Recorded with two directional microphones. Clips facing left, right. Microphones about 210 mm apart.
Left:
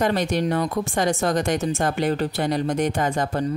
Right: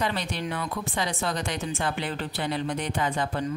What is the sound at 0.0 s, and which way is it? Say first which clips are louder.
Speech: left 8 dB; 45° left (ahead or behind).